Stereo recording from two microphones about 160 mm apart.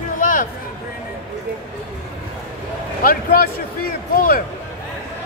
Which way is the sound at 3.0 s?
60° left (ahead or behind).